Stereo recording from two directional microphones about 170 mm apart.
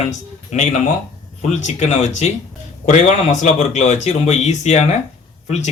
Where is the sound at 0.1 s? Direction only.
45° left (ahead or behind).